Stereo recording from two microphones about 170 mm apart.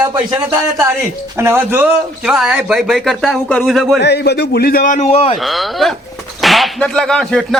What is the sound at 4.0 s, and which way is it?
A man's voice, 80° left.